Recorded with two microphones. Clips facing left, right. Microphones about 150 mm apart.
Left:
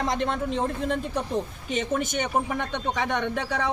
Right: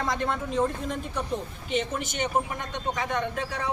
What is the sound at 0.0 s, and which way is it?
Speech, 20° left (ahead or behind).